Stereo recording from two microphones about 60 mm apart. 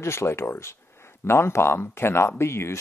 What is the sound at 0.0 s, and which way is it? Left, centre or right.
Speech, left.